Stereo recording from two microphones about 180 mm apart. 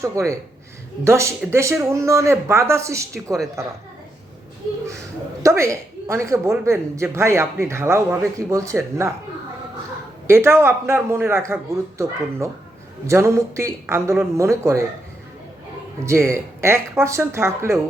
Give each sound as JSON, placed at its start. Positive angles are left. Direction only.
{"t": 0.0, "sound": "a woman's voice", "side_deg": -15}
{"t": 5.4, "sound": "a woman's voice", "side_deg": -15}
{"t": 10.2, "sound": "a woman's voice", "side_deg": -15}
{"t": 16.0, "sound": "a woman's voice", "side_deg": -15}